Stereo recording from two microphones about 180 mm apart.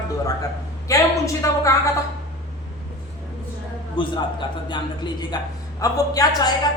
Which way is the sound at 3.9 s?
25° left (ahead or behind).